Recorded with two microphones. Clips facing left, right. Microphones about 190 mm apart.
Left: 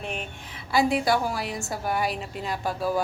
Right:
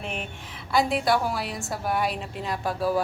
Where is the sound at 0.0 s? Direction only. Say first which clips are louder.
Even; centre (ahead or behind).